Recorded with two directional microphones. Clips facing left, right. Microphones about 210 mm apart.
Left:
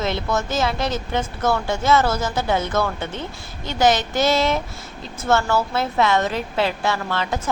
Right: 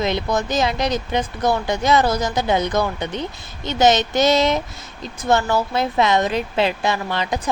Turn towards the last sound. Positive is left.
turn(degrees=-15)  # may be behind; listen again after turning